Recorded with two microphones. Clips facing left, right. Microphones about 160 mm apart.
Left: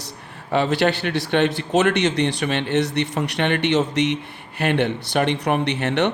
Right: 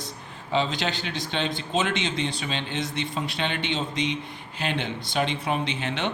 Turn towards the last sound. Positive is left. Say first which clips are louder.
# left 8 dB
turn(degrees=65)  # may be behind; listen again after turning